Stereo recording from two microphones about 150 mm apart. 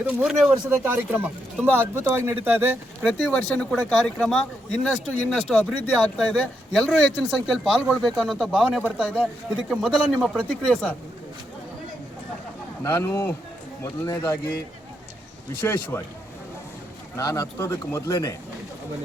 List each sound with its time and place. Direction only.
0.0 s speech: 5° right (ahead or behind)
0.7 s speech: 15° right (ahead or behind)
3.1 s speech: 5° left (ahead or behind)
12.8 s speech: 15° left (ahead or behind)
15.6 s speech: 15° left (ahead or behind)
17.2 s speech: 20° left (ahead or behind)